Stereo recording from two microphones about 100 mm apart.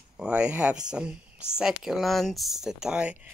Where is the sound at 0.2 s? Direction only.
10° right (ahead or behind).